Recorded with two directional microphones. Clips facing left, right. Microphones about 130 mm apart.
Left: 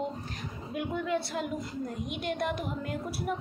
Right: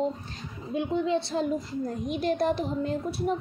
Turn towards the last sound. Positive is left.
turn(degrees=-25)  # may be behind; listen again after turning